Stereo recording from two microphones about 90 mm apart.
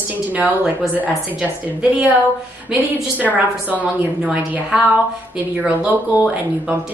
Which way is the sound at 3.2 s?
20° right (ahead or behind).